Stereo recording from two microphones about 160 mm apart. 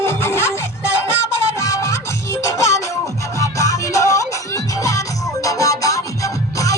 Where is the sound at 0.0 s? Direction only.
15° left (ahead or behind).